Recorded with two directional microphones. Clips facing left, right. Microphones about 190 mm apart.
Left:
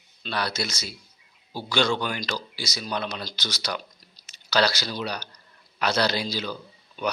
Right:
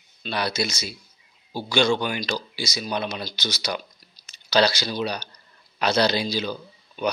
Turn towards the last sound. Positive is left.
turn(degrees=-20)  # may be behind; listen again after turning